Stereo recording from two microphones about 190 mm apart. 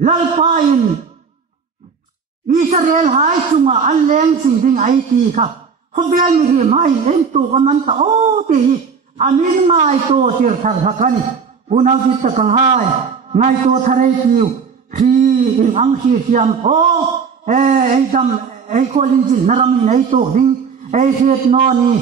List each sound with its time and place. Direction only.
0.0 s a man's voice: 35° right (ahead or behind)
2.7 s a man's voice: 40° right (ahead or behind)